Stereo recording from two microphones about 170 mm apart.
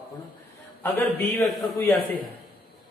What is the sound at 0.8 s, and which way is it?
A man's voice, 10° left (ahead or behind).